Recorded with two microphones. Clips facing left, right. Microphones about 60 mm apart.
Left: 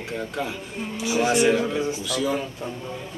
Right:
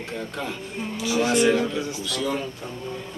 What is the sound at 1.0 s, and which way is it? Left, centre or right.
Speech, left.